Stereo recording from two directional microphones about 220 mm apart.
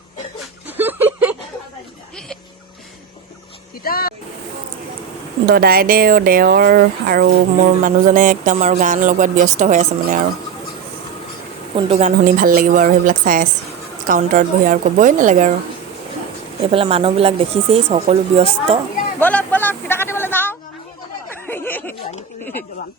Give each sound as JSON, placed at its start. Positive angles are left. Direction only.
{"t": 0.8, "sound": "a sound", "side_deg": -10}
{"t": 3.8, "sound": "speech", "side_deg": 40}
{"t": 5.5, "sound": "speech", "side_deg": -40}
{"t": 11.8, "sound": "speech", "side_deg": -25}
{"t": 16.7, "sound": "speech", "side_deg": -25}
{"t": 19.2, "sound": "a sound", "side_deg": 5}